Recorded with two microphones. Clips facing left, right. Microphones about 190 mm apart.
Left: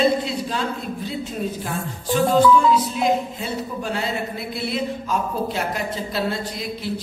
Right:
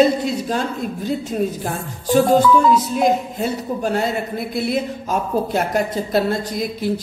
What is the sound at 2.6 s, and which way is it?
A woman's voice, 45° right (ahead or behind).